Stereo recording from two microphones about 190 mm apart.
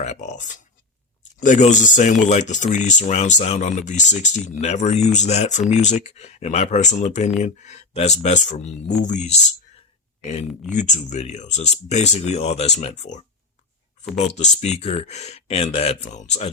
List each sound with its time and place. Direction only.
0.0 s speech: 35° left (ahead or behind)
10.8 s speech: 40° left (ahead or behind)